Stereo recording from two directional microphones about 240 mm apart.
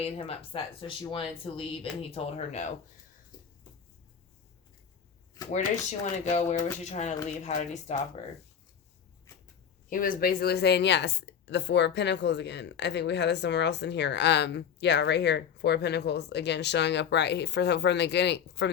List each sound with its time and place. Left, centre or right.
0.0 s speech: left
3.3 s a sound: centre
5.5 s speech: left
9.9 s a woman's voice: left